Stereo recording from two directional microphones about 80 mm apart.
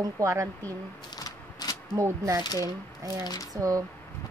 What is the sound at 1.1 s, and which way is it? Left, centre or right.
Shuffling cards, left.